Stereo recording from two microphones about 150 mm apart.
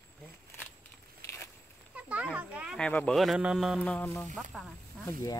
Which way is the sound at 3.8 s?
10° left (ahead or behind).